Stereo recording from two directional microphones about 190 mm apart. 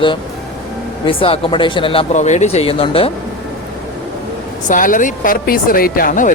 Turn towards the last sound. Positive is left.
turn(degrees=45)  # may be behind; listen again after turning